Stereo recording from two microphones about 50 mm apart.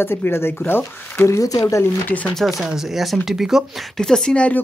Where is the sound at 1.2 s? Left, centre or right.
Left.